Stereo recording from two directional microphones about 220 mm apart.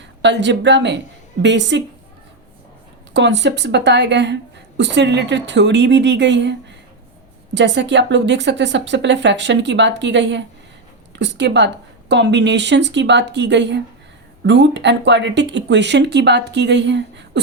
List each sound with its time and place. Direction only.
0.2 s a woman's voice: 55° right (ahead or behind)
3.1 s a woman's voice: 55° right (ahead or behind)